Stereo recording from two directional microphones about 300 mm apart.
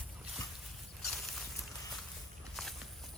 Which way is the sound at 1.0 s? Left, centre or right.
Centre.